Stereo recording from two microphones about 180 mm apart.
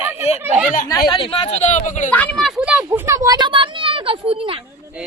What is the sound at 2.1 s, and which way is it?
Speech, 5° left (ahead or behind).